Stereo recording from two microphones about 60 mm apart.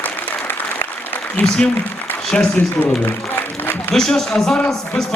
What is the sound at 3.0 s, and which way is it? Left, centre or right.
Music, left.